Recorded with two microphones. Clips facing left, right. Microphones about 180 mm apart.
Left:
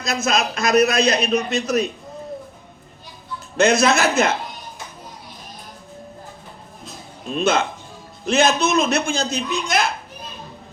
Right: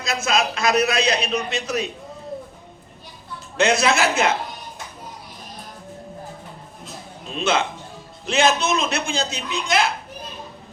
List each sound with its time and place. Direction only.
0.0 s a man's voice: 40° left (ahead or behind)
3.6 s a man's voice: 40° left (ahead or behind)
7.3 s a man's voice: 45° left (ahead or behind)